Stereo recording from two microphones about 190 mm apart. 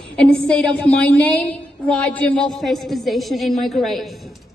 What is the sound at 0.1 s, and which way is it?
A woman's voice, 5° left (ahead or behind).